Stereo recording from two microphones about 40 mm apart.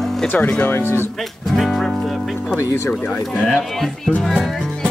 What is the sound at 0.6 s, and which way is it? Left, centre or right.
Speech, left.